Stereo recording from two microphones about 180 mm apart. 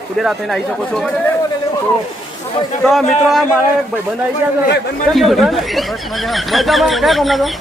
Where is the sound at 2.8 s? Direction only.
Centre (ahead or behind).